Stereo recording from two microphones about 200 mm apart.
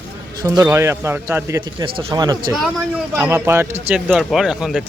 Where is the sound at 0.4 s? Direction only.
15° right (ahead or behind).